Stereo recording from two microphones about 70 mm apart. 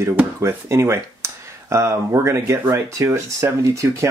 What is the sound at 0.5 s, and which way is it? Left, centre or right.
Speech, right.